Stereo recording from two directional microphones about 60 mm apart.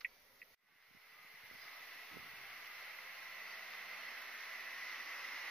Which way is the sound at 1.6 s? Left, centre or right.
Centre.